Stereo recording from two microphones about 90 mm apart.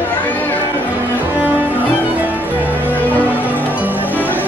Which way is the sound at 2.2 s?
20° right (ahead or behind).